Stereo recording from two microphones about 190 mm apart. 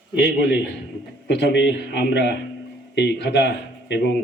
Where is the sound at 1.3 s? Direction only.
65° left (ahead or behind).